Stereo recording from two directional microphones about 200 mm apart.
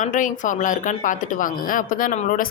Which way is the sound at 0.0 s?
40° left (ahead or behind).